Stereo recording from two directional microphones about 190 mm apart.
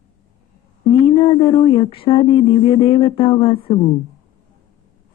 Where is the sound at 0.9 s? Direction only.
25° left (ahead or behind).